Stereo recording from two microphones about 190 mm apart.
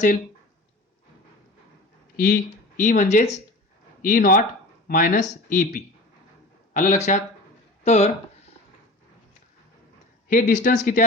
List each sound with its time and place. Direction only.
2.1 s speech: 50° left (ahead or behind); by 8.1 s 35° left (ahead or behind)
10.2 s speech: 40° left (ahead or behind)